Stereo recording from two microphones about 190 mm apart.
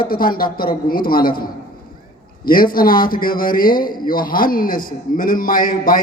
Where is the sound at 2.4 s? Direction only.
50° left (ahead or behind).